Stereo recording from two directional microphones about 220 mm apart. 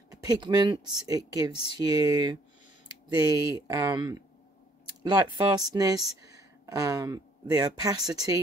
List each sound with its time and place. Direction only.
0.1 s speech: 20° right (ahead or behind)